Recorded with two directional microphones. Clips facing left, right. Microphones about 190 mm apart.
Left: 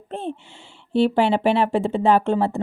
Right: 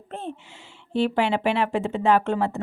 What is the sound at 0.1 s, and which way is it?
Speech, 30° left (ahead or behind).